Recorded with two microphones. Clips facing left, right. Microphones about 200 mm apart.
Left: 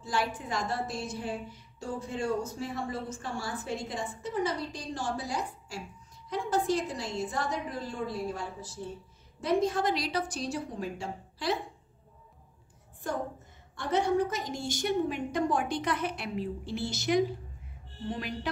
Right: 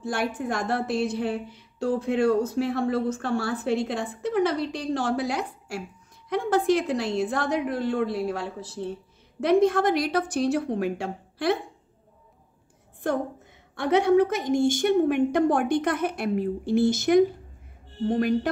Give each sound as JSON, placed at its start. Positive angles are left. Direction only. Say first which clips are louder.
{"t": 0.0, "sound": "a woman's voice", "louder": "right 5 dB", "side_deg": -55}
{"t": 13.7, "sound": "a woman's voice", "louder": "right 8 dB", "side_deg": -65}
{"t": 14.5, "sound": "a woman's voice", "louder": "right 10 dB", "side_deg": -50}